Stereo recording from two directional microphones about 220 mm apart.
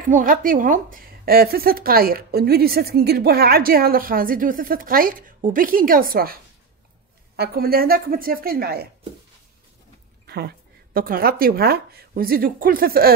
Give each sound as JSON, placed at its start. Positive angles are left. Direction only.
{"t": 0.0, "sound": "a woman's voice", "side_deg": -35}
{"t": 10.2, "sound": "speech", "side_deg": -45}